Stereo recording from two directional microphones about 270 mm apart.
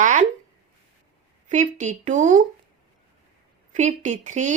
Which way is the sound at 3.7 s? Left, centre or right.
Right.